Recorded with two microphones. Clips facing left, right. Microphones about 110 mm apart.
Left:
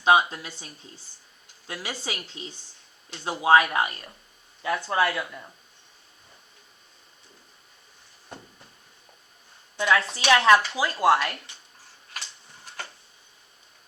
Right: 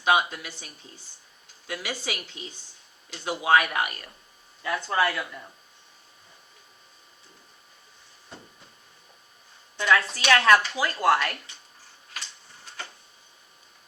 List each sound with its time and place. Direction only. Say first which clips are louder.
0.0 s speech: left 3 dB; 30° left (ahead or behind)
9.7 s speech: even; 20° left (ahead or behind)